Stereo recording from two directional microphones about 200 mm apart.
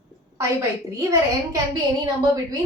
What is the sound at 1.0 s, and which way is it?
Speech, 15° right (ahead or behind).